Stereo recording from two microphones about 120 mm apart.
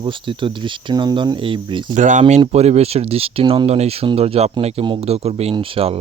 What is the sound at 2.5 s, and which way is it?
Speech, 65° right (ahead or behind).